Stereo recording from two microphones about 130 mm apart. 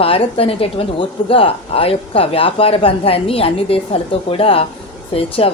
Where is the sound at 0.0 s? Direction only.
45° left (ahead or behind).